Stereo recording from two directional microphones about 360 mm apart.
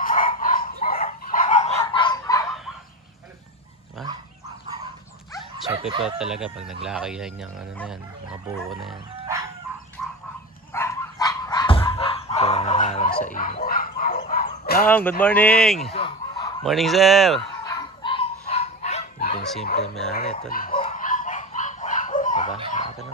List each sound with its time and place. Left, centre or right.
0.0 s dog: left
1.8 s fowl: centre
6.0 s speech: centre
8.5 s music: centre
10.7 s dog: centre; by 14.8 s left
14.9 s speech: centre
15.9 s fowl: centre
16.6 s speech: centre
17.6 s a sound: centre
19.6 s speech: centre
20.2 s dog: left